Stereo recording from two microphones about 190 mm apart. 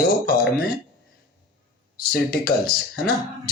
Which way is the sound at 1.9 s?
55° left (ahead or behind).